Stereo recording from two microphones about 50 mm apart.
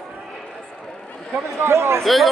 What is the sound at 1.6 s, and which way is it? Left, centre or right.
Speech, right.